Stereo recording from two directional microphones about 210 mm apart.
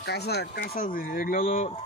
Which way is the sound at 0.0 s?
50° left (ahead or behind).